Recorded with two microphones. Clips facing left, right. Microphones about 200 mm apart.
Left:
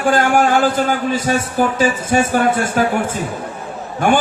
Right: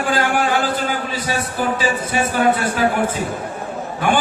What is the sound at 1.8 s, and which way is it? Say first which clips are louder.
A man's voice: left 4 dB; 45° left (ahead or behind).